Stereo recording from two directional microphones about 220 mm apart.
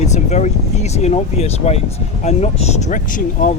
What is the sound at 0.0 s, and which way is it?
Speech, 30° left (ahead or behind).